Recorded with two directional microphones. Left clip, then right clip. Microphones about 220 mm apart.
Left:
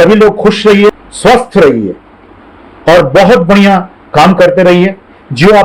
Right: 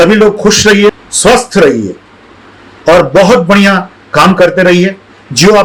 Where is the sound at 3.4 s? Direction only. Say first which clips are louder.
Left 1 dB; 15° right (ahead or behind).